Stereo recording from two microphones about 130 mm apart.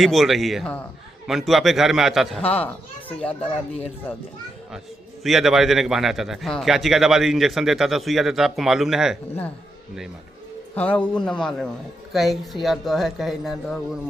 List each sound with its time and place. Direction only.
0.0 s a man's voice: centre (ahead or behind)
2.4 s speech: 50° left (ahead or behind)
2.6 s a child's voice: 10° left (ahead or behind)
5.2 s a man's voice: centre (ahead or behind)
10.8 s a man's voice: 10° left (ahead or behind)